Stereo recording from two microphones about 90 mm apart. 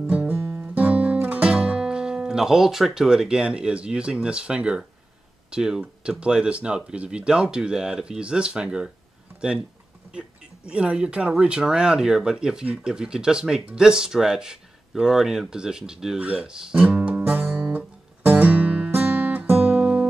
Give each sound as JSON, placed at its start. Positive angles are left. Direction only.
{"t": 0.0, "sound": "guitar", "side_deg": -15}
{"t": 0.5, "sound": "music", "side_deg": -15}
{"t": 5.5, "sound": "speech", "side_deg": -10}
{"t": 10.1, "sound": "speech", "side_deg": -10}
{"t": 16.3, "sound": "guitar", "side_deg": -10}